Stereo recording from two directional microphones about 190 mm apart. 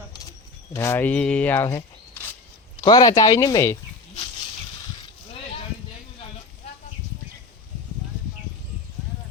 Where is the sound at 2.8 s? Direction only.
20° left (ahead or behind).